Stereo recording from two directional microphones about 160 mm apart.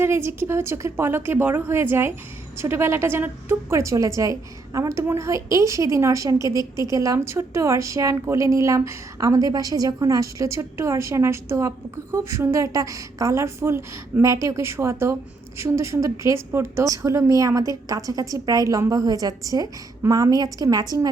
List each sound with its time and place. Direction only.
0.0 s a woman's voice: 15° right (ahead or behind)